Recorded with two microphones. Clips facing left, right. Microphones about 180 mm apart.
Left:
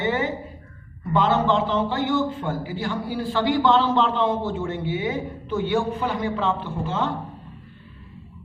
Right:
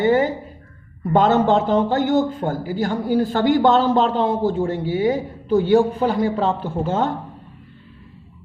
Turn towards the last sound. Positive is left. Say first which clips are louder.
# right 5 dB
turn(degrees=-40)  # may be behind; listen again after turning